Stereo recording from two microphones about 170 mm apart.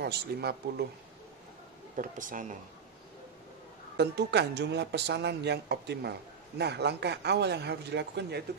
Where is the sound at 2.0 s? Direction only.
50° right (ahead or behind).